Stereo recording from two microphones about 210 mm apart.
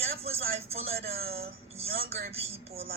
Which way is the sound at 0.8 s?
45° right (ahead or behind).